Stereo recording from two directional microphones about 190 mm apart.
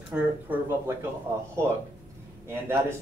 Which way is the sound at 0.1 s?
10° right (ahead or behind).